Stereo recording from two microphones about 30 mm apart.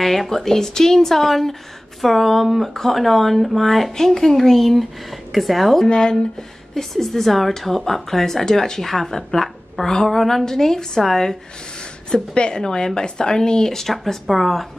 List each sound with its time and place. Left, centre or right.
0.0 s speech: centre
3.9 s speech: centre
4.4 s speech: centre
5.9 s a woman's voice: left
6.7 s speech: centre
12.4 s a woman's voice: left
13.7 s speech: centre